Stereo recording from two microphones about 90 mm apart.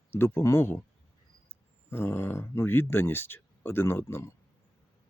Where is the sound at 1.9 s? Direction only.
25° left (ahead or behind).